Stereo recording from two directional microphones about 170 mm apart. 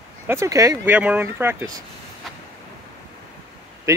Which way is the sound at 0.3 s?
15° right (ahead or behind).